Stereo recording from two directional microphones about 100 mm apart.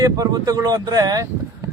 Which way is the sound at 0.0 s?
35° right (ahead or behind).